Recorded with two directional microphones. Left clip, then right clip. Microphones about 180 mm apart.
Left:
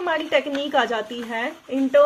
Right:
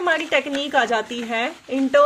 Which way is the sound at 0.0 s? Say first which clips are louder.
Right 2 dB; 25° right (ahead or behind).